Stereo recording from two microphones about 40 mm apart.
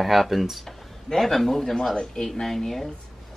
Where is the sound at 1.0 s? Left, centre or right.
Centre.